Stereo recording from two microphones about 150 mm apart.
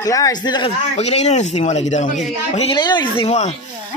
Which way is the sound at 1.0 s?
45° left (ahead or behind).